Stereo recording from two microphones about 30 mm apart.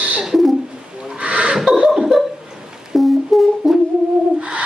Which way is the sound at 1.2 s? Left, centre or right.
Right.